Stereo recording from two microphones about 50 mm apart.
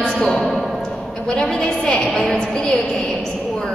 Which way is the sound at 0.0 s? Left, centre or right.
Centre.